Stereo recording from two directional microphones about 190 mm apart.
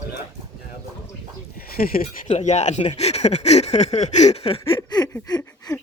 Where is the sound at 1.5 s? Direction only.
50° left (ahead or behind).